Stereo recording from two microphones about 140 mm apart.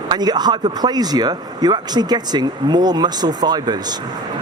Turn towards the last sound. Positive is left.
turn(degrees=-30)  # may be behind; listen again after turning